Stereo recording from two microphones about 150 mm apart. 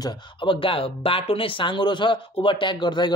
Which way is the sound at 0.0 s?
30° left (ahead or behind).